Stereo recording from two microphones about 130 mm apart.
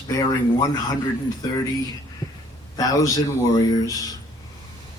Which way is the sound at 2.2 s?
30° left (ahead or behind).